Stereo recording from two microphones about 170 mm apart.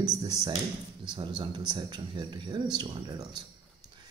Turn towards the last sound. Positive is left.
turn(degrees=-25)  # may be behind; listen again after turning